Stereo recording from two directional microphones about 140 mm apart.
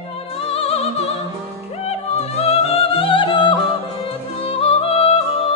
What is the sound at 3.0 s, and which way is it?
Music, 35° left (ahead or behind).